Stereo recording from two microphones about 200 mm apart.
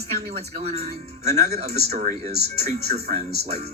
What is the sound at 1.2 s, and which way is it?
Speech, 35° right (ahead or behind).